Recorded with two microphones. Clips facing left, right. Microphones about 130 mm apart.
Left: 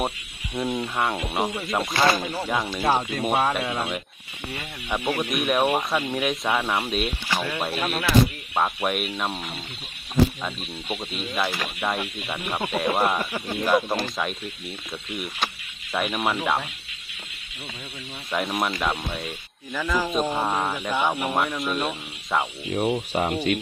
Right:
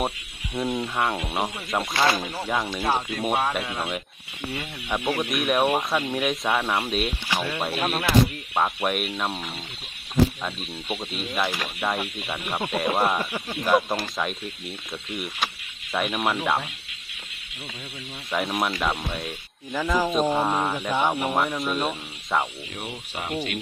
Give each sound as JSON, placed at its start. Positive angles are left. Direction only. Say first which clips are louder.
{"t": 0.5, "sound": "speech", "louder": "even", "side_deg": 0}
{"t": 18.3, "sound": "speech", "louder": "even", "side_deg": 0}
{"t": 19.7, "sound": "speech", "louder": "right 2 dB", "side_deg": -20}
{"t": 20.1, "sound": "speech", "louder": "right 2 dB", "side_deg": 0}
{"t": 22.9, "sound": "speech", "louder": "left 10 dB", "side_deg": 45}